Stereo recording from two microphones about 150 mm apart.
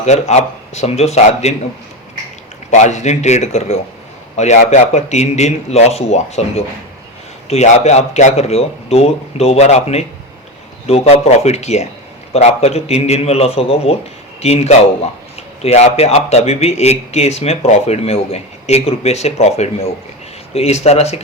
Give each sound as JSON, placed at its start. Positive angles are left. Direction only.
{"t": 0.0, "sound": "speech", "side_deg": 50}
{"t": 2.6, "sound": "speech", "side_deg": 50}